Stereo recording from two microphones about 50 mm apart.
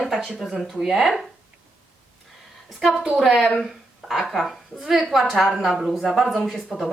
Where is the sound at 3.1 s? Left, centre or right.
Centre.